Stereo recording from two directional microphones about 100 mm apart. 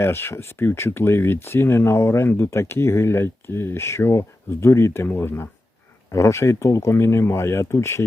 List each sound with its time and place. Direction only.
0.0 s speech: 25° left (ahead or behind)